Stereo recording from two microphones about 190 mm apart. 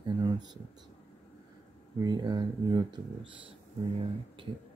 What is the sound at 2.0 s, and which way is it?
Speech, 20° right (ahead or behind).